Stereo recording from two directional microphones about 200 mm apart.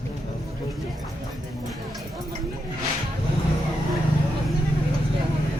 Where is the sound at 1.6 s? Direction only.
Centre (ahead or behind).